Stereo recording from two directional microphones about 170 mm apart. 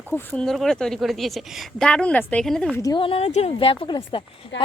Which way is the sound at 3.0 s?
35° left (ahead or behind).